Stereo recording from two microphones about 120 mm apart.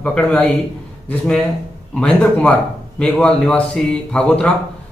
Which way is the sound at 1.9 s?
10° left (ahead or behind).